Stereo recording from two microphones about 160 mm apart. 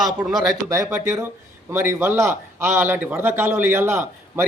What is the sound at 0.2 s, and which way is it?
Speech, 25° right (ahead or behind).